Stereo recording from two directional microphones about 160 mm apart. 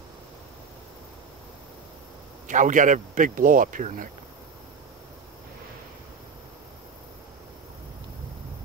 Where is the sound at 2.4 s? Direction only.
55° right (ahead or behind).